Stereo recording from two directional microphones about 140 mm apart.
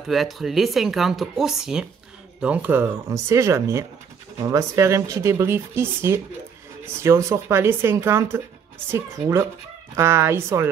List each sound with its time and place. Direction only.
0.1 s speech: centre (ahead or behind); by 10.7 s 20° right (ahead or behind)